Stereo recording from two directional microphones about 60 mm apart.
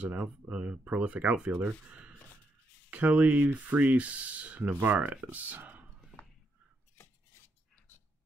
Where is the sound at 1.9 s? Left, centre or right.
Right.